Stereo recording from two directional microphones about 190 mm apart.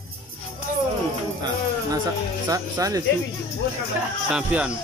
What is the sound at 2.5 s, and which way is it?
Speech, 15° right (ahead or behind).